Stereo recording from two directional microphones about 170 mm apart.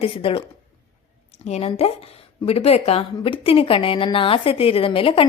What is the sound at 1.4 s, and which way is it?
A woman's voice, 40° left (ahead or behind).